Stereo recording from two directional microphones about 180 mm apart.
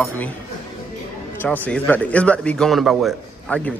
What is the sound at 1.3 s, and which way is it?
A man's voice, 10° left (ahead or behind).